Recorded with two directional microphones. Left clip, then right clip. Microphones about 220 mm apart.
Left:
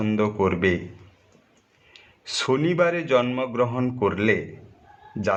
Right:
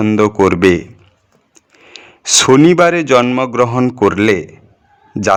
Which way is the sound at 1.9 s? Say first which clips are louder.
Right 16 dB; 50° right (ahead or behind).